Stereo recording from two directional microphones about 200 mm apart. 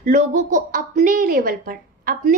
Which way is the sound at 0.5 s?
40° right (ahead or behind).